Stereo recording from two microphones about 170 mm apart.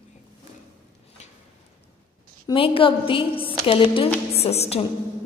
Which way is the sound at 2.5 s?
30° left (ahead or behind).